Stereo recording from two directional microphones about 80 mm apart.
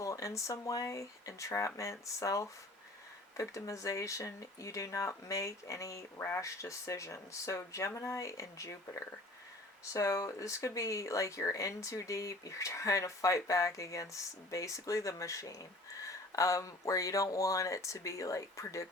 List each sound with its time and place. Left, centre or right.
0.0 s speech: left
3.5 s speech: left